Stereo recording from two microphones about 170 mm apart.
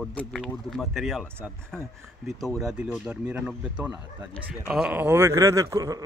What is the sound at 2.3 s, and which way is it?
Speech, centre (ahead or behind).